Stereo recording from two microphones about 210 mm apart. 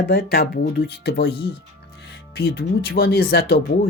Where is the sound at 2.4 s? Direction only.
50° left (ahead or behind).